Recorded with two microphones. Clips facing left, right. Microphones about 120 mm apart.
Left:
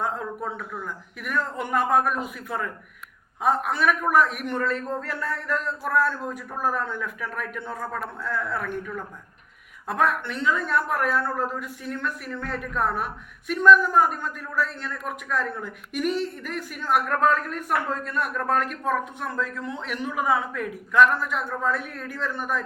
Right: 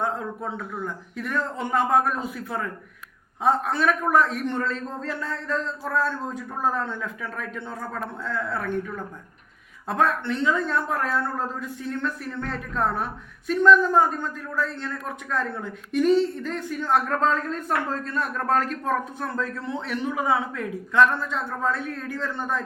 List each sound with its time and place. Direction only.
0.0 s a man's voice: 25° right (ahead or behind)